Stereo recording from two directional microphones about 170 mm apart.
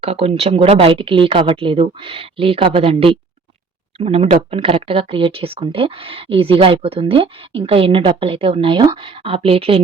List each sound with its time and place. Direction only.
0.0 s speech: 35° right (ahead or behind)